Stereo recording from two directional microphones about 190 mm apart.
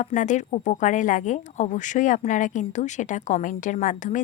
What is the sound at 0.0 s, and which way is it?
Speech, 40° left (ahead or behind).